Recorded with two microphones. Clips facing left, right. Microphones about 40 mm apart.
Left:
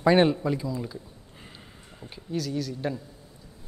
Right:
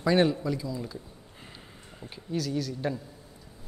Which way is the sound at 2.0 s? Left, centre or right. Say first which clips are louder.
Left 1 dB; centre.